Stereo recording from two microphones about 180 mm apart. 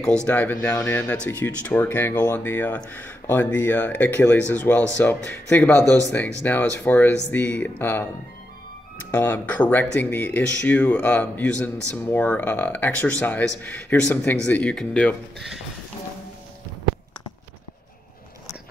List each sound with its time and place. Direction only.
0.0 s speech: 5° left (ahead or behind)
5.8 s speech: 20° right (ahead or behind)
6.4 s speech: 10° left (ahead or behind)
9.1 s speech: 10° left (ahead or behind)